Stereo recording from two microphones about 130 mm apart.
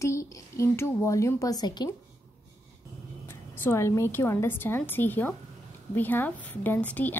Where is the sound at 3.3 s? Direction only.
20° left (ahead or behind).